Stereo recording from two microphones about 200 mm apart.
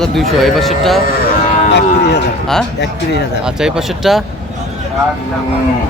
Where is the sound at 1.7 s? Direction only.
55° left (ahead or behind).